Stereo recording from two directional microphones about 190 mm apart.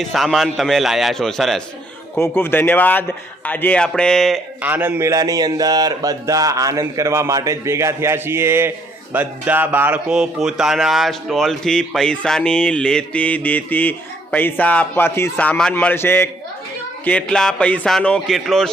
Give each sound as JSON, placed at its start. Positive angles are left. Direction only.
{"t": 0.0, "sound": "speech", "side_deg": 0}
{"t": 2.1, "sound": "speech", "side_deg": 10}
{"t": 4.6, "sound": "a man's voice", "side_deg": -10}